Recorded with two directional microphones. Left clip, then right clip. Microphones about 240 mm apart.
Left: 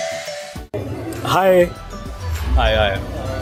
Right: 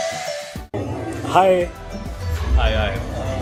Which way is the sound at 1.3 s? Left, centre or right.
Left.